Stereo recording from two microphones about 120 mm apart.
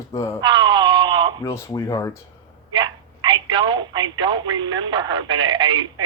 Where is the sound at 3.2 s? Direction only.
40° right (ahead or behind).